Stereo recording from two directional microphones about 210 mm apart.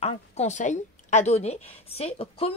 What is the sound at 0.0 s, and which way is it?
A woman's voice, 30° left (ahead or behind).